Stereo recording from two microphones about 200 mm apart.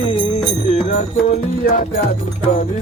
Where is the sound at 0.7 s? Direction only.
35° left (ahead or behind).